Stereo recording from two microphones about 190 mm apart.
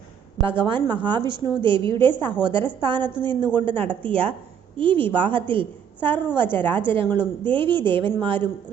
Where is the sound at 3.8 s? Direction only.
5° left (ahead or behind).